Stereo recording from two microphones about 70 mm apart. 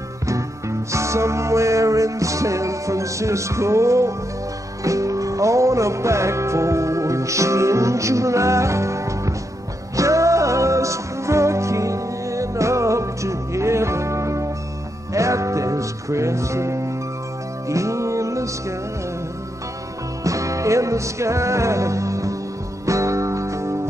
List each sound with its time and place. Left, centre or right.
0.3 s music: right
20.2 s music: right